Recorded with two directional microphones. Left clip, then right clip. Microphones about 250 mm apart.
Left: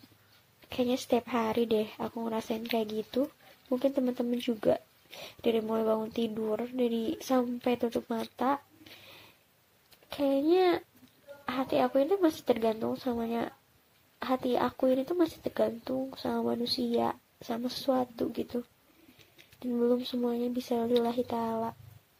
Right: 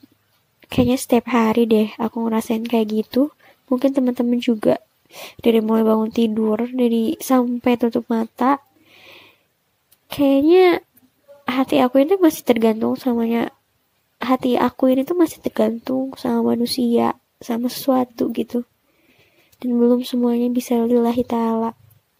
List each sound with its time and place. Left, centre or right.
0.6 s speech: right
10.0 s speech: right
19.6 s speech: right